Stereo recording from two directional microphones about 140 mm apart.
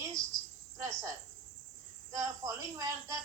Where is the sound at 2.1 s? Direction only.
25° right (ahead or behind).